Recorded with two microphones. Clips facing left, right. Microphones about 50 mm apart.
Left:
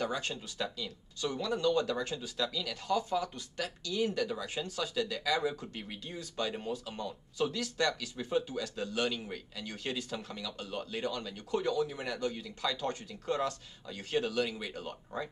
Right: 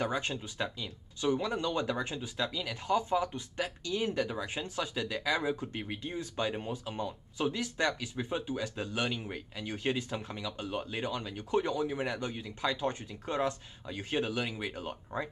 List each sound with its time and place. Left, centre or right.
0.0 s speech: right